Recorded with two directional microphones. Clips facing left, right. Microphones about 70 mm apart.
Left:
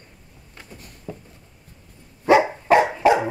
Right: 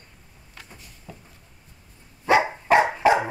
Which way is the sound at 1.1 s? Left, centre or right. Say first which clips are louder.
Left 8 dB; left.